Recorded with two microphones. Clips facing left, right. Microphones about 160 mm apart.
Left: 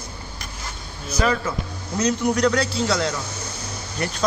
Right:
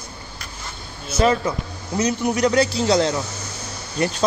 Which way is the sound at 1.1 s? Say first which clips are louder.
Right 4 dB; 25° right (ahead or behind).